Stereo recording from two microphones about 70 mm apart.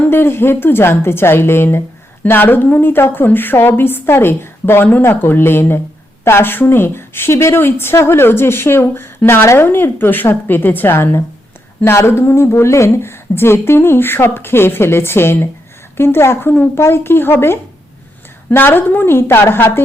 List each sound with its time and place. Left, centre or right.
0.0 s a woman's voice: left